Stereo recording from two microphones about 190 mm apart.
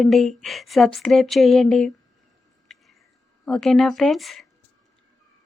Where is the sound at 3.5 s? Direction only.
Centre (ahead or behind).